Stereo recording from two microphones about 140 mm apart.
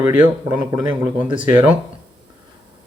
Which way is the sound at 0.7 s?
25° right (ahead or behind).